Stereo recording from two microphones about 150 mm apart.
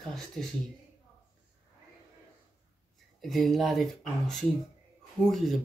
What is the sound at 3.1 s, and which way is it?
Speech, centre (ahead or behind).